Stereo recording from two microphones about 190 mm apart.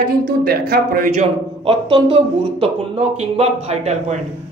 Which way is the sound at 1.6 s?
30° right (ahead or behind).